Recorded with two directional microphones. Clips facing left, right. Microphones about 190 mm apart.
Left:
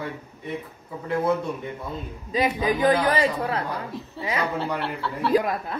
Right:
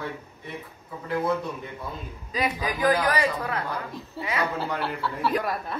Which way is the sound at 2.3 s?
25° left (ahead or behind).